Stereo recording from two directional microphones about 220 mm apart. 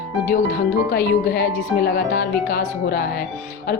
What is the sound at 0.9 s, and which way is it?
Speech, 45° left (ahead or behind).